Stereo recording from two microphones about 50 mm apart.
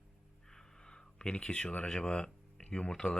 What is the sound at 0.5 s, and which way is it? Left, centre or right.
Speech, centre.